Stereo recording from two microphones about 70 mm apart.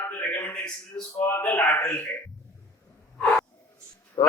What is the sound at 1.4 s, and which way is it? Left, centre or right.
Speech, left.